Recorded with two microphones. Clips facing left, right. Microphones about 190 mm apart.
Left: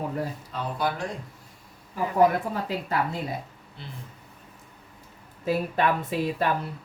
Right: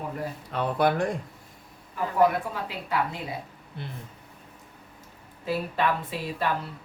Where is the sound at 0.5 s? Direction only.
60° right (ahead or behind).